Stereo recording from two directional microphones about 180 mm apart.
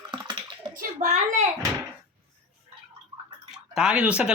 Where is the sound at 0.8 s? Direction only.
40° right (ahead or behind).